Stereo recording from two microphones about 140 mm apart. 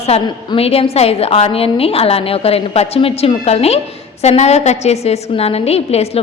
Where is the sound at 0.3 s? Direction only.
30° left (ahead or behind).